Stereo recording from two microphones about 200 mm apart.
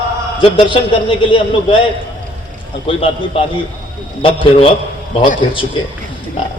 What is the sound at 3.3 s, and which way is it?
A man's voice, 30° left (ahead or behind).